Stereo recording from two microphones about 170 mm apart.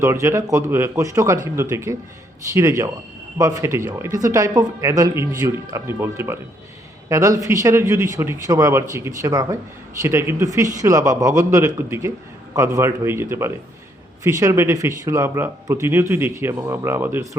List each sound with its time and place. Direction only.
0.0 s speech: 15° right (ahead or behind)